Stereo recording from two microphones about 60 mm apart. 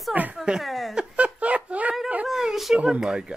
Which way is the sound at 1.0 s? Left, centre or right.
Right.